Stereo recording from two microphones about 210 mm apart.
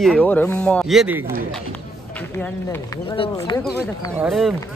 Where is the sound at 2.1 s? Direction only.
10° left (ahead or behind).